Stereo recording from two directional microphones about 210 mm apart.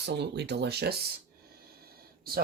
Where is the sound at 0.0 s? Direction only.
55° right (ahead or behind).